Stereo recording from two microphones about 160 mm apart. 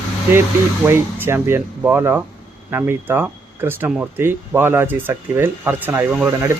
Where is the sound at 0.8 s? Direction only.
15° right (ahead or behind).